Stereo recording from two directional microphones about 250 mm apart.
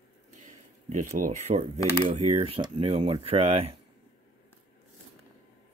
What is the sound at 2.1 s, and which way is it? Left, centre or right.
Speech, right.